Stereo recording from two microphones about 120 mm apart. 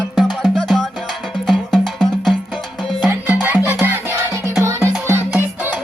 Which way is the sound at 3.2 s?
15° right (ahead or behind).